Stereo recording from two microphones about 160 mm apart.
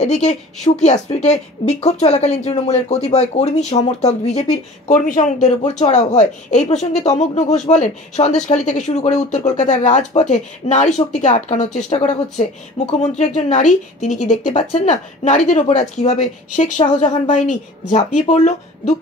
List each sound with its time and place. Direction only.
0.0 s a woman's voice: 45° left (ahead or behind)